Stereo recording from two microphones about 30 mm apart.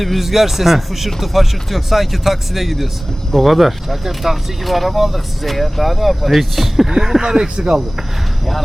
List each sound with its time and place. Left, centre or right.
0.0 s speech: centre
6.9 s speech: centre